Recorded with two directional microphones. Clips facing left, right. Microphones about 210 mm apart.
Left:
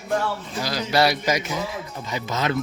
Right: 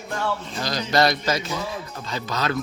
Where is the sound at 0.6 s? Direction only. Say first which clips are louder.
Even; 10° left (ahead or behind).